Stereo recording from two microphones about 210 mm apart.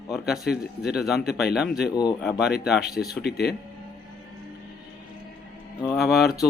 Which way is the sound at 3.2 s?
50° left (ahead or behind).